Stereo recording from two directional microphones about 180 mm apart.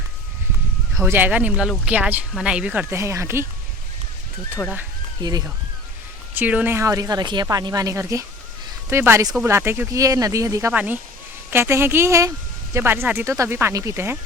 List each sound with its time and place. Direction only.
0.9 s speech: 10° right (ahead or behind)
5.2 s speech: 20° right (ahead or behind)
6.3 s speech: 10° right (ahead or behind)